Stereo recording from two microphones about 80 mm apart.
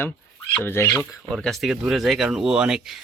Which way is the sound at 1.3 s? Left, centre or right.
Centre.